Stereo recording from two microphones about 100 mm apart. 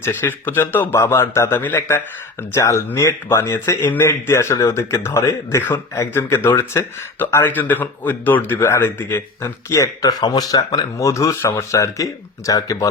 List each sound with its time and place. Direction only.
0.0 s speech: 25° left (ahead or behind)
2.6 s speech: 30° left (ahead or behind)
5.6 s speech: 20° left (ahead or behind)